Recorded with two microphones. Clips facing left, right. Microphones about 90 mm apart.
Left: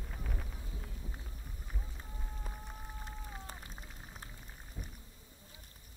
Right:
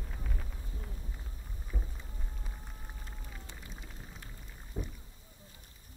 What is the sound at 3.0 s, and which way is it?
Rain on surface, 40° left (ahead or behind).